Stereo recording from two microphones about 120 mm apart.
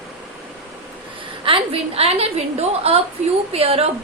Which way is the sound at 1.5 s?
50° right (ahead or behind).